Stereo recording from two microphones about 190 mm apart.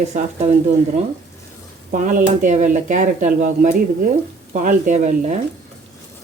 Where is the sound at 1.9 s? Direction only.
45° right (ahead or behind).